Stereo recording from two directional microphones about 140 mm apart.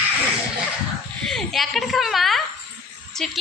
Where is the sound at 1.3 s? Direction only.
Centre (ahead or behind).